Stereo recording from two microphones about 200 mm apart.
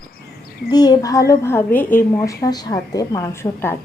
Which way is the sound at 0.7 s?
20° left (ahead or behind).